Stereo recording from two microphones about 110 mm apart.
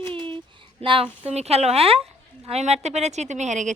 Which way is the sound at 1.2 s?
75° right (ahead or behind).